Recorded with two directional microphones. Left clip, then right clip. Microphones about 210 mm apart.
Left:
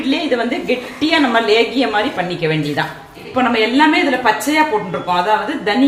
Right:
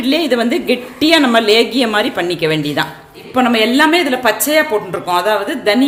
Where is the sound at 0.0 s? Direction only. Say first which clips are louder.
Right 3 dB; 50° right (ahead or behind).